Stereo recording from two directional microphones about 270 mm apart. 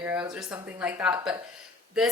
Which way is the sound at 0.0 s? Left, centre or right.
Centre.